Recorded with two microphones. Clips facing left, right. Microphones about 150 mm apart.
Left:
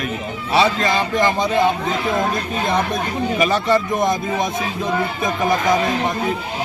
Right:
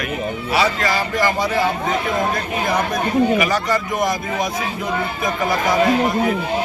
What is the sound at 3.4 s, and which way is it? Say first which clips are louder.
Speech: left 2 dB; 25° left (ahead or behind).